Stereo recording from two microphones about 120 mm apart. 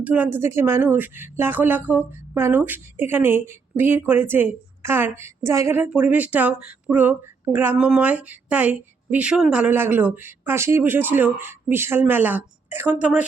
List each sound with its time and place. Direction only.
0.0 s a woman's voice: 15° right (ahead or behind)